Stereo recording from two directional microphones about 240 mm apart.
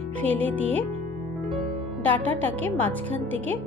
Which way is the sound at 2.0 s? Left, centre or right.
Centre.